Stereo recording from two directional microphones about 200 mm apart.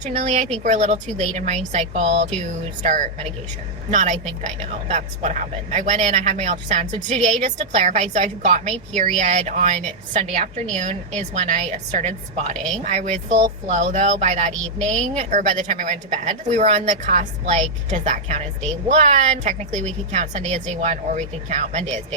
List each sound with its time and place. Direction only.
0.0 s a woman's voice: 35° right (ahead or behind)
14.6 s a woman's voice: 5° left (ahead or behind)
15.2 s a woman's voice: 40° right (ahead or behind)